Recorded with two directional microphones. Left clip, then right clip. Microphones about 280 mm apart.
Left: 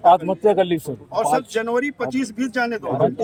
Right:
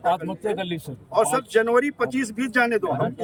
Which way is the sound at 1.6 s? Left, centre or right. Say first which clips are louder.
Right 2 dB; centre.